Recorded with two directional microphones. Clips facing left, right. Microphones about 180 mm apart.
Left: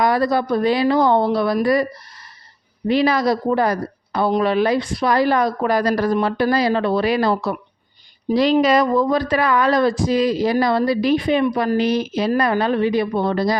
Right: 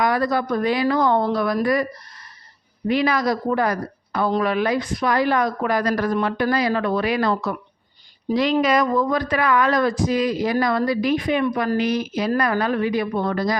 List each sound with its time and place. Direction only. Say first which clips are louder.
0.0 s a woman's voice: left 3 dB; 30° left (ahead or behind)